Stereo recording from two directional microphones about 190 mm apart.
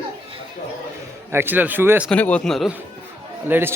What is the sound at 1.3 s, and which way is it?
Speech, 10° right (ahead or behind).